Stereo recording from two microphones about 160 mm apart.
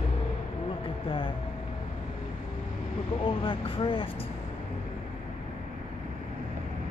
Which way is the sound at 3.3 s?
35° left (ahead or behind).